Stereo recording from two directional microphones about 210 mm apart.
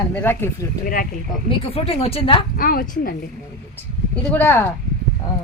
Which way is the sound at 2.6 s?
45° left (ahead or behind).